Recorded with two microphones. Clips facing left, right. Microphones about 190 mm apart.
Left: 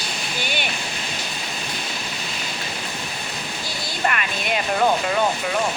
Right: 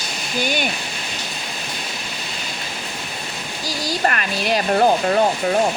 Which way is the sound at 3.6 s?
40° right (ahead or behind).